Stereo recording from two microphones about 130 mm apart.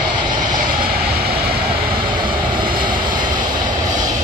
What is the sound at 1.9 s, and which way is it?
Vehicle, 40° right (ahead or behind).